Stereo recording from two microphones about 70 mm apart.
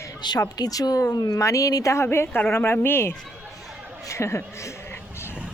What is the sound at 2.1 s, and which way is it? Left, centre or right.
A woman's voice, left.